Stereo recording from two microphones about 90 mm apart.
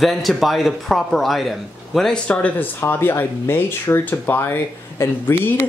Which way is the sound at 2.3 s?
20° left (ahead or behind).